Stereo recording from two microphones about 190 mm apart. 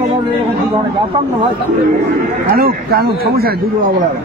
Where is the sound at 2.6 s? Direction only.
55° right (ahead or behind).